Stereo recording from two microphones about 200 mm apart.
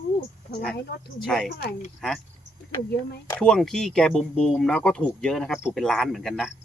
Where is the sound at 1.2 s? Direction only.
5° left (ahead or behind).